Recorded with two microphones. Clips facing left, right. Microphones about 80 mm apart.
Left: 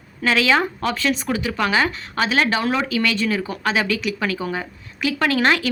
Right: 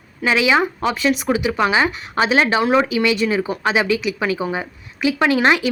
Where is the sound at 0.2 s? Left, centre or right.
Centre.